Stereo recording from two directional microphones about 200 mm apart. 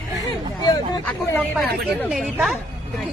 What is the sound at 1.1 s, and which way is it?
Speech, centre (ahead or behind).